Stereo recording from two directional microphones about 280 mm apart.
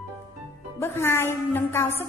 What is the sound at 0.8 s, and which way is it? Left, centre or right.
A woman's voice, centre.